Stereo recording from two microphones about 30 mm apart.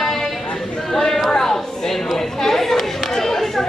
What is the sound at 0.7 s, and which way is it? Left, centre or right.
Chatter, centre.